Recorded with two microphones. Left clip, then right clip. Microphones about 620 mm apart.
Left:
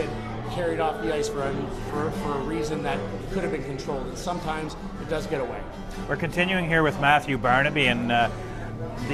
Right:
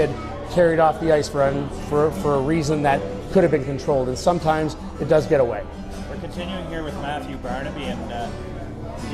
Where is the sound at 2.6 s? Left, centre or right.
Right.